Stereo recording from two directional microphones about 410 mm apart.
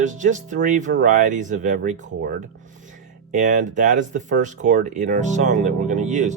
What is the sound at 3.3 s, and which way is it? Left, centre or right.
Speech, centre.